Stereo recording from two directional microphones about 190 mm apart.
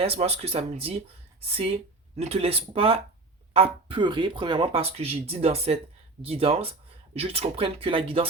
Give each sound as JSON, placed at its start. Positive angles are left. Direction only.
{"t": 0.0, "sound": "speech", "side_deg": -30}